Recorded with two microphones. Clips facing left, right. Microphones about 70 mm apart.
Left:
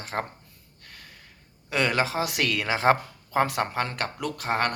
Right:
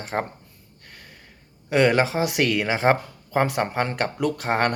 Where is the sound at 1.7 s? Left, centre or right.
Right.